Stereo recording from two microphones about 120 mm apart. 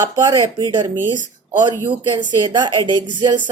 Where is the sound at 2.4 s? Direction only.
35° right (ahead or behind).